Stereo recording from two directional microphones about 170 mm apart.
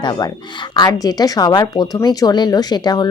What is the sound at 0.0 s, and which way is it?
A woman's voice, 25° left (ahead or behind).